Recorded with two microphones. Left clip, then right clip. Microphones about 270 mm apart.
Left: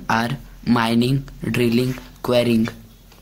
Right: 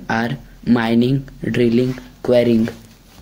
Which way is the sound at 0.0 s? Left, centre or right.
Centre.